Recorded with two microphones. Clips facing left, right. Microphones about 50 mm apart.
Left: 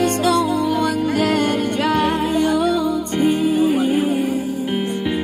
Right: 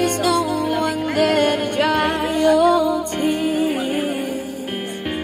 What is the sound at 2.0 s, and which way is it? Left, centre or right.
Music, right.